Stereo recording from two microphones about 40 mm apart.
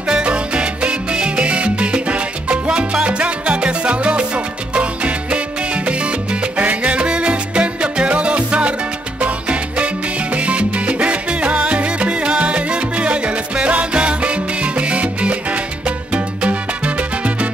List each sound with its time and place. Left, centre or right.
0.1 s salsa music: right
6.6 s music: right
9.2 s salsa music: right
16.1 s music: right